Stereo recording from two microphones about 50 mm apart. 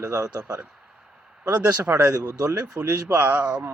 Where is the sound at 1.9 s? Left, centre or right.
Right.